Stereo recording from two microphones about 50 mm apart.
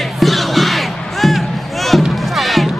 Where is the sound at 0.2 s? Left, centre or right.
Centre.